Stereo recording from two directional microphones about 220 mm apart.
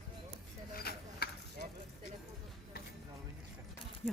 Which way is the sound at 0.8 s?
45° left (ahead or behind).